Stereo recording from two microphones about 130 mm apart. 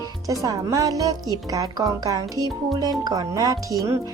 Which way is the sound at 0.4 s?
25° right (ahead or behind).